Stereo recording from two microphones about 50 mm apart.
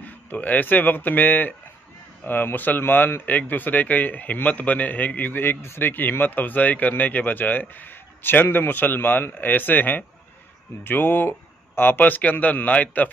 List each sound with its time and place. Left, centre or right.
0.0 s speech: left
5.9 s speech: left